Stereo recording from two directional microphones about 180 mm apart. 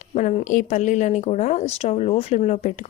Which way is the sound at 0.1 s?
40° left (ahead or behind).